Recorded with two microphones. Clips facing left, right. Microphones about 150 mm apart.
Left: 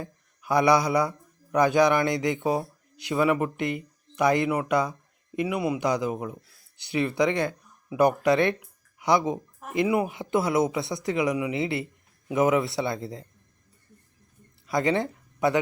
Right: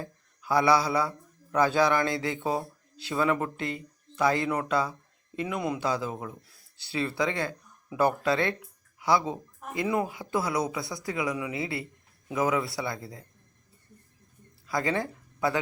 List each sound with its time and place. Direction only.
0.0 s speech: 20° left (ahead or behind)
14.7 s speech: 20° left (ahead or behind)